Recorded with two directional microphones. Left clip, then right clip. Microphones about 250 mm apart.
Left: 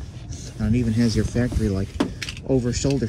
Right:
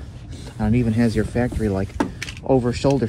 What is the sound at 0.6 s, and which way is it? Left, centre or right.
Speech, centre.